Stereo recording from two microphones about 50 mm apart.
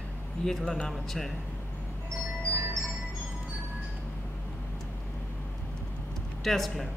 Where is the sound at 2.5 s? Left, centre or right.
Right.